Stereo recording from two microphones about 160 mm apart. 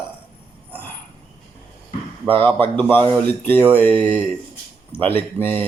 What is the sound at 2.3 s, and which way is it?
Speech, 10° left (ahead or behind).